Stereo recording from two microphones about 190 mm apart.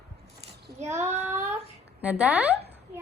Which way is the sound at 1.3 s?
15° right (ahead or behind).